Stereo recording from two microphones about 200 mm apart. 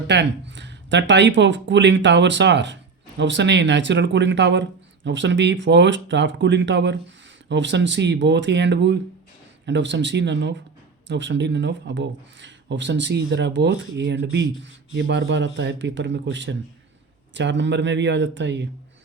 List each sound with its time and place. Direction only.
0.1 s speech: 60° right (ahead or behind)